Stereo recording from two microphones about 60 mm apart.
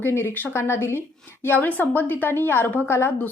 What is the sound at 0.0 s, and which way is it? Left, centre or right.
A woman's voice, left.